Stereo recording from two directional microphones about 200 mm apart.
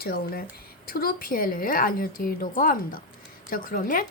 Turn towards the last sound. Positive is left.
turn(degrees=45)  # may be behind; listen again after turning